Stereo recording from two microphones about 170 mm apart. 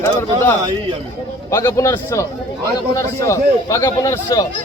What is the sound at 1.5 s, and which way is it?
A man's voice, 15° left (ahead or behind).